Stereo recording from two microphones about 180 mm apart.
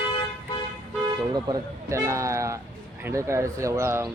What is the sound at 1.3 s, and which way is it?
Speech, 20° right (ahead or behind).